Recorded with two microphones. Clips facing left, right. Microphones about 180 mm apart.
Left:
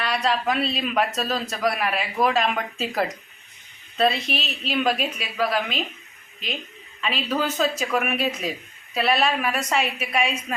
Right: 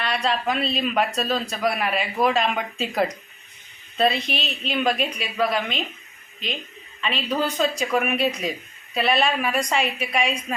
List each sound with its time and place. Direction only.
0.0 s speech: 5° left (ahead or behind)
7.0 s speech: centre (ahead or behind)